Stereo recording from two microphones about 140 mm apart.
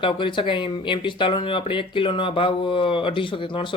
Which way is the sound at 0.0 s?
35° left (ahead or behind).